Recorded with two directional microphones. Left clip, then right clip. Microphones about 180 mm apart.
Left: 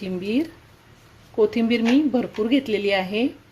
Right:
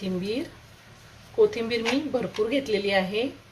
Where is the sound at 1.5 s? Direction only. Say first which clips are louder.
Left 5 dB; 45° left (ahead or behind).